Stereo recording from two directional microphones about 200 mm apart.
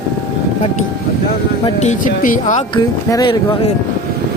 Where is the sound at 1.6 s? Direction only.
35° left (ahead or behind).